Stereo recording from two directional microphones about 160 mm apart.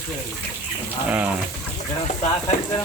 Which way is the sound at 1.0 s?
10° right (ahead or behind).